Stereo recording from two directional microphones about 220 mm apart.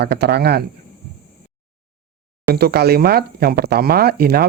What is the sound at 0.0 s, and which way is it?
Speech, 50° right (ahead or behind).